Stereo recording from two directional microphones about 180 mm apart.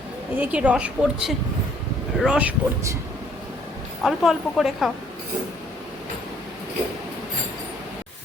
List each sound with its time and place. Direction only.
0.3 s a woman's voice: 10° right (ahead or behind)
4.0 s speech: centre (ahead or behind)